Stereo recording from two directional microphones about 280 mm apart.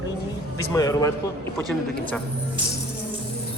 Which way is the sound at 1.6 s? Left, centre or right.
Centre.